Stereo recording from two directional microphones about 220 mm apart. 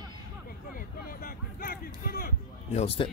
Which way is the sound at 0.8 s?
40° left (ahead or behind).